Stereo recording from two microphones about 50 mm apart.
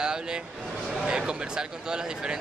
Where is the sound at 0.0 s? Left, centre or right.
Centre.